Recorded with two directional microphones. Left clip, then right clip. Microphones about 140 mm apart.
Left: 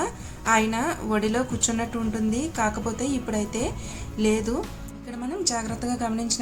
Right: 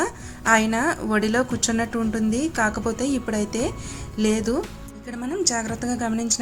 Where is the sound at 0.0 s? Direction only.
40° right (ahead or behind).